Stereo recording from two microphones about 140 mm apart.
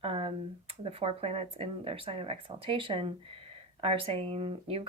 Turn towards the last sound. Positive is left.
turn(degrees=-45)  # may be behind; listen again after turning